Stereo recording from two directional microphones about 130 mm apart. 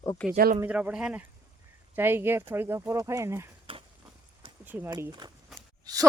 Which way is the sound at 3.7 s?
45° right (ahead or behind).